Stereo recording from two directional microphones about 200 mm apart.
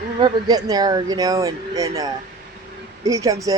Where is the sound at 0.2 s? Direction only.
20° right (ahead or behind).